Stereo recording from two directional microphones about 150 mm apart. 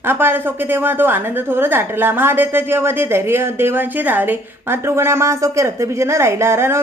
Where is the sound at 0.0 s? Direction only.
15° right (ahead or behind).